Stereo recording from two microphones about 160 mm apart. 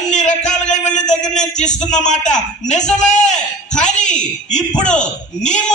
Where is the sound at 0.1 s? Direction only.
50° left (ahead or behind).